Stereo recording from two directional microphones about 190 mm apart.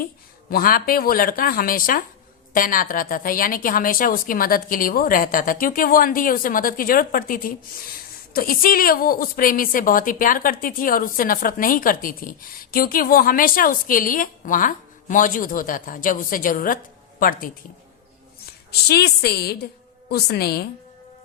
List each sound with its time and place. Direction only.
0.5 s a woman's voice: 50° left (ahead or behind)
18.7 s a woman's voice: 55° left (ahead or behind)